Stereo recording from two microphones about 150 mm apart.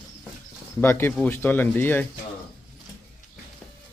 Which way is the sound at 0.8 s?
15° left (ahead or behind).